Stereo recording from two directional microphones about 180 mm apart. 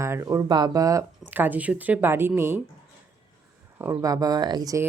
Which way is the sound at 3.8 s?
15° right (ahead or behind).